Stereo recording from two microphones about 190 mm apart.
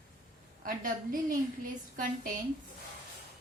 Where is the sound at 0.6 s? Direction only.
45° right (ahead or behind).